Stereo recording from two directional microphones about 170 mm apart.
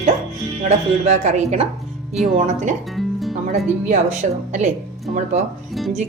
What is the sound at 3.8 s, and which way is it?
A woman's voice, 45° right (ahead or behind).